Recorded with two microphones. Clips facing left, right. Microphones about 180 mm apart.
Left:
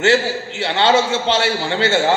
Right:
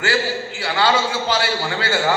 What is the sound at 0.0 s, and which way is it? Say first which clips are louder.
A man's voice: left 5 dB; 25° left (ahead or behind).